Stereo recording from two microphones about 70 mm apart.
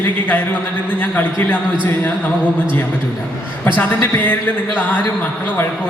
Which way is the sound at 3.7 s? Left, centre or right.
Left.